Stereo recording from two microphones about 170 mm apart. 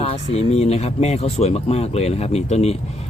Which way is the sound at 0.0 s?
40° left (ahead or behind).